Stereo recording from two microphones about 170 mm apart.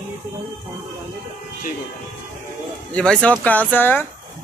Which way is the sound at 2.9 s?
5° left (ahead or behind).